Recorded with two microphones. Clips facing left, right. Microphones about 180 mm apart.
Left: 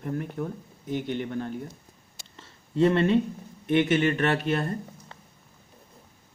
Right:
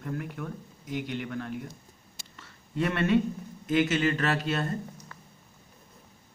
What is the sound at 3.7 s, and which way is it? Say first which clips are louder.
Speech: left 3 dB; 25° left (ahead or behind).